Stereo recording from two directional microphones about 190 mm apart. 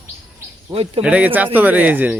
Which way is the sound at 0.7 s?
30° right (ahead or behind).